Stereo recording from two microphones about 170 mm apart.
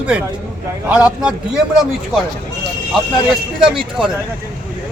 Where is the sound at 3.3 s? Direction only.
Centre (ahead or behind).